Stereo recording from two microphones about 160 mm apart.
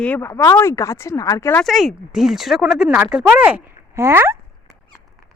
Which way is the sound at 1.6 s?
Centre (ahead or behind).